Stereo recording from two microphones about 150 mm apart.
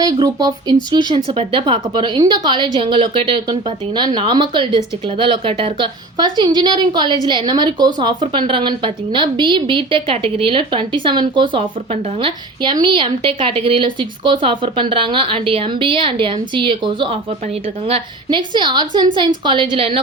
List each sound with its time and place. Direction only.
0.0 s a woman's voice: 25° right (ahead or behind)